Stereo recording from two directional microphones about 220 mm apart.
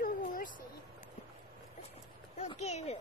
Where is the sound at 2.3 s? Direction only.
30° left (ahead or behind).